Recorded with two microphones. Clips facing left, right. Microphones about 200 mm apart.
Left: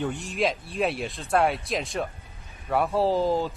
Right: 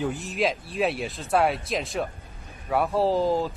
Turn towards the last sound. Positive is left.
turn(degrees=0)  # may be behind; listen again after turning